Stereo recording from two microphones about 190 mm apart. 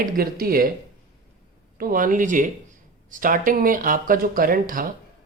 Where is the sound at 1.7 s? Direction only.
45° right (ahead or behind).